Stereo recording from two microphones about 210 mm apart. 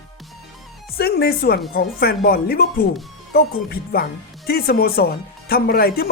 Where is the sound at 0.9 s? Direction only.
50° left (ahead or behind).